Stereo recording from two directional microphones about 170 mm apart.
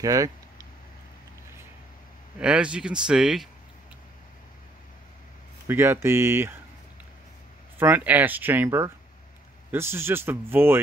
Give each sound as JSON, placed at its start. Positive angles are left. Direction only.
{"t": 0.0, "sound": "a sound", "side_deg": -20}
{"t": 2.3, "sound": "speech", "side_deg": -5}
{"t": 5.7, "sound": "speech", "side_deg": -15}
{"t": 7.8, "sound": "speech", "side_deg": -10}